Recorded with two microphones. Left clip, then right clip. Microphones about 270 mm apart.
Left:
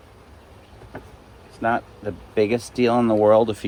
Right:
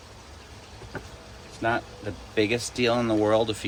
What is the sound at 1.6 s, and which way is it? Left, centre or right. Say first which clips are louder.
Speech: left 4 dB; centre.